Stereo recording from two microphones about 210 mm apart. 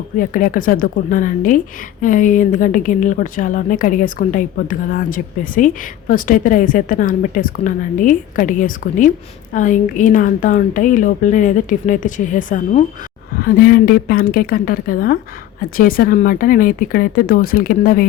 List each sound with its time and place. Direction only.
0.2 s a woman's voice: 40° left (ahead or behind)